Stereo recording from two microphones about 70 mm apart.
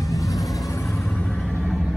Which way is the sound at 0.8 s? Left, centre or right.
Centre.